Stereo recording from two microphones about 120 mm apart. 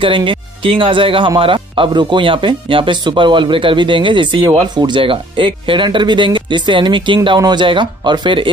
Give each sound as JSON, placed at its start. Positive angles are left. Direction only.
{"t": 0.0, "sound": "speech", "side_deg": -45}